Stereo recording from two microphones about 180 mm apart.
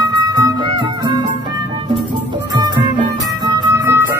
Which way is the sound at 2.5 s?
25° right (ahead or behind).